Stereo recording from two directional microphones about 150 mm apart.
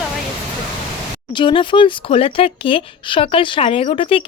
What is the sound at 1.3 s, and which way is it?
Speech, 35° left (ahead or behind).